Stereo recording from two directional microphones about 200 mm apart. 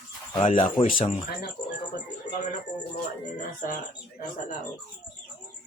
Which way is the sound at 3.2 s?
40° left (ahead or behind).